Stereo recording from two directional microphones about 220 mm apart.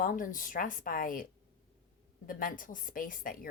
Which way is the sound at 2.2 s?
40° left (ahead or behind).